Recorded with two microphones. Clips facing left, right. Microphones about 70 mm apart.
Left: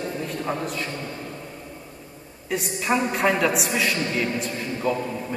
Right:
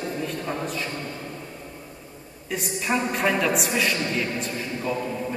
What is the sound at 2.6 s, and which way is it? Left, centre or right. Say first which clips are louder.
Speech: left 1 dB; left.